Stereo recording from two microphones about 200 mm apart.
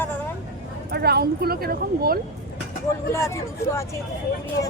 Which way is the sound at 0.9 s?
50° right (ahead or behind).